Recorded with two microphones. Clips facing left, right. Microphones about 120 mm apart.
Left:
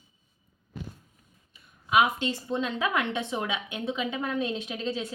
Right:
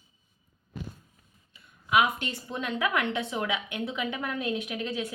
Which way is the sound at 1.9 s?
20° left (ahead or behind).